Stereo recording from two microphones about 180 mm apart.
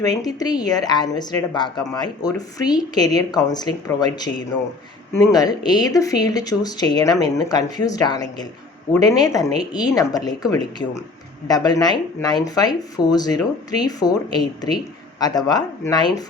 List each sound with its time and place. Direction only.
0.0 s speech: 20° left (ahead or behind)